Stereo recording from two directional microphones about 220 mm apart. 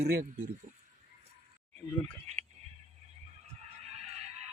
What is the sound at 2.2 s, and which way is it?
Speech, 30° right (ahead or behind).